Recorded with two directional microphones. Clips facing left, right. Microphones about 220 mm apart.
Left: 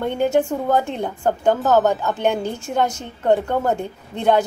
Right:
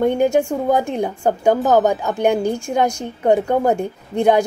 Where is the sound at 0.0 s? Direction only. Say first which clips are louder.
Right 3 dB; 15° right (ahead or behind).